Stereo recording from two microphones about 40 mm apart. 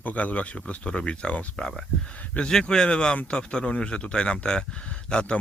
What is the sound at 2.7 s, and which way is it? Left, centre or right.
Speech, left.